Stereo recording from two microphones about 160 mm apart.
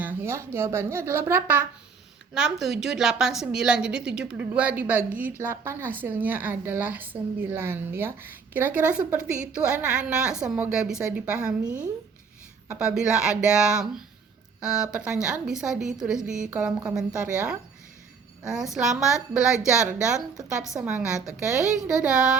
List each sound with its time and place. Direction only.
0.0 s a woman's voice: 15° right (ahead or behind)
18.4 s a woman's voice: centre (ahead or behind)